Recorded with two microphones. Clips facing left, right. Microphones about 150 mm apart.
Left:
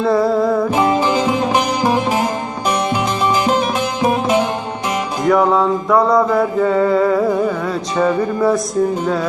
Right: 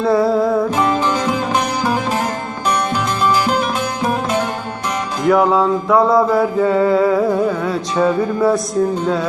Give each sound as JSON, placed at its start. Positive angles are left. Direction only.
{"t": 0.0, "sound": "music", "side_deg": 0}
{"t": 1.5, "sound": "music", "side_deg": 20}
{"t": 5.2, "sound": "music", "side_deg": 0}